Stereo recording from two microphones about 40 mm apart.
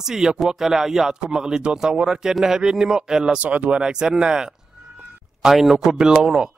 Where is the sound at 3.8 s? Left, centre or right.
Centre.